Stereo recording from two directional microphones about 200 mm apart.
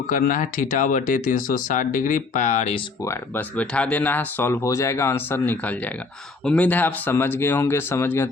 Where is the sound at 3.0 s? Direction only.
10° left (ahead or behind).